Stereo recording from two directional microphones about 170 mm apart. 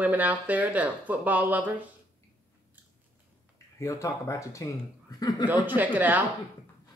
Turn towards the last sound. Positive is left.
turn(degrees=-10)  # may be behind; listen again after turning